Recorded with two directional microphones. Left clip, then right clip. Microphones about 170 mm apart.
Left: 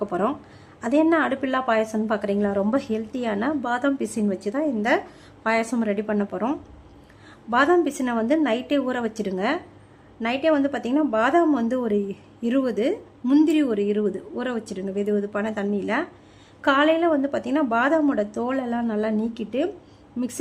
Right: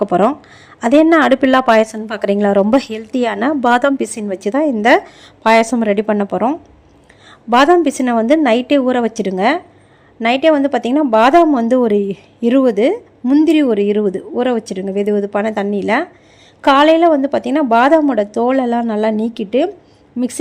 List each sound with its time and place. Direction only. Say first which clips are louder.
0.0 s a woman's voice: right 11 dB; 35° right (ahead or behind)